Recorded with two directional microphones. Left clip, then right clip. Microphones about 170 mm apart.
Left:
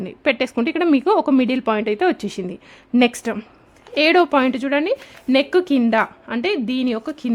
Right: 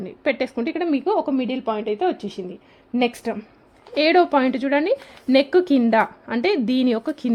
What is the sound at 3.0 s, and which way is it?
A woman's voice, 10° left (ahead or behind).